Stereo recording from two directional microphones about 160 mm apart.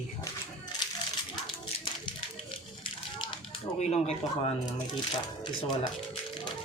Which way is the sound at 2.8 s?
30° left (ahead or behind).